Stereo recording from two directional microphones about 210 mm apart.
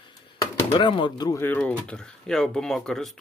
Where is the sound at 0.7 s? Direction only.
25° left (ahead or behind).